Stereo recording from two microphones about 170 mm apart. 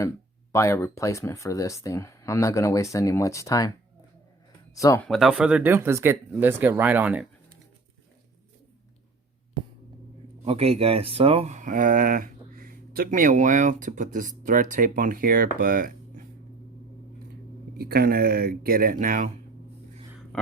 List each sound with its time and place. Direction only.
0.5 s speech: 15° left (ahead or behind)
4.7 s speech: 20° left (ahead or behind)
5.0 s speech: centre (ahead or behind)
10.4 s speech: 35° right (ahead or behind); by 16.2 s 55° right (ahead or behind)
17.7 s speech: 65° right (ahead or behind)